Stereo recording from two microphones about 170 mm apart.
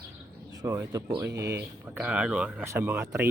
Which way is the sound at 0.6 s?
20° right (ahead or behind).